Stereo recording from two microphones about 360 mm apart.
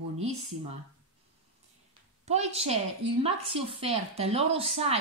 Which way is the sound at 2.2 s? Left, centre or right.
Centre.